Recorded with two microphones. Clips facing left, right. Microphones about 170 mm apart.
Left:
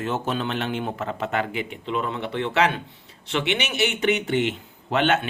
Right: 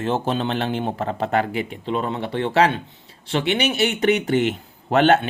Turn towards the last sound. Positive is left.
turn(degrees=-40)  # may be behind; listen again after turning